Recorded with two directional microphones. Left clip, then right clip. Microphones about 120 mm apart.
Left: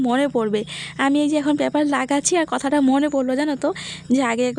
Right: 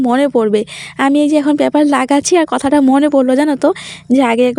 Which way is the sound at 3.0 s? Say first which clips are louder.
Right 9 dB; 50° right (ahead or behind).